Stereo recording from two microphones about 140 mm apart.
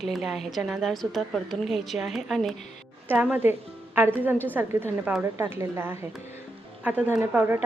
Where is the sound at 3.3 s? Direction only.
15° right (ahead or behind).